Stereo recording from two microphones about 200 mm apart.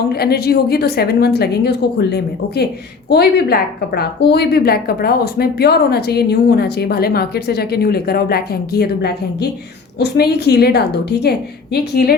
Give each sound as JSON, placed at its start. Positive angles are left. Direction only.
{"t": 0.1, "sound": "a woman's voice", "side_deg": 50}